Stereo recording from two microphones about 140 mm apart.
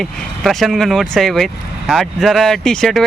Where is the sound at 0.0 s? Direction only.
Centre (ahead or behind).